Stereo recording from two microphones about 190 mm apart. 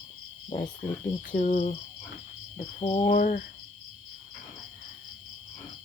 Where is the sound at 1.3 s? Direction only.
40° left (ahead or behind).